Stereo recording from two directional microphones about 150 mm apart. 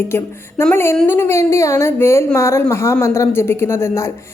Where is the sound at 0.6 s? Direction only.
15° left (ahead or behind).